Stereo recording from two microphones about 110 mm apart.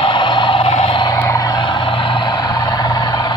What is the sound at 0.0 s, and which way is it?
Vehicle, 45° left (ahead or behind).